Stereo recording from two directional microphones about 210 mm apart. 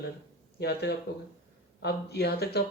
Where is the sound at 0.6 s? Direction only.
50° left (ahead or behind).